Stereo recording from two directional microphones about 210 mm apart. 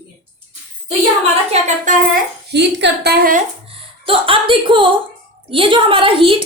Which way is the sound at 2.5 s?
55° right (ahead or behind).